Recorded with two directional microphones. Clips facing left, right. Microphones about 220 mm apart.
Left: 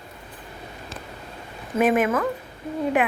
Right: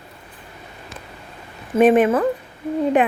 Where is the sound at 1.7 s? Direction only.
30° right (ahead or behind).